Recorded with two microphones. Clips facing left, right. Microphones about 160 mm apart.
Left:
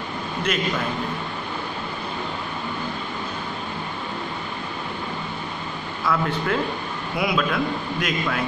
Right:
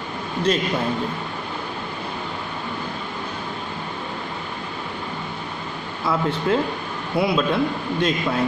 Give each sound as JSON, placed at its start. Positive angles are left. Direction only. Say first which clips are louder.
{"t": 6.0, "sound": "a man's voice", "louder": "right 2 dB", "side_deg": -25}